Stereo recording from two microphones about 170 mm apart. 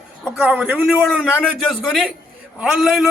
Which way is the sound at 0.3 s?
10° right (ahead or behind).